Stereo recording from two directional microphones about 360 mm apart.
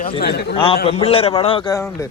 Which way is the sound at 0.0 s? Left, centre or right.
Left.